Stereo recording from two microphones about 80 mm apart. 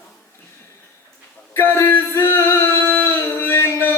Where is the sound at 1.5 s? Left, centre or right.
Left.